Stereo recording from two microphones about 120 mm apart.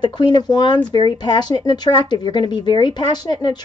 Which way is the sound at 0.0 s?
40° left (ahead or behind).